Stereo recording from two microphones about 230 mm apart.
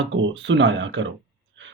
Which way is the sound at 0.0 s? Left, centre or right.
Right.